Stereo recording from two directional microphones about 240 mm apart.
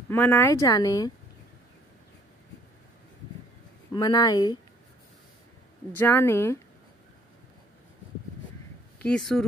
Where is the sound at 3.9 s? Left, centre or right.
Centre.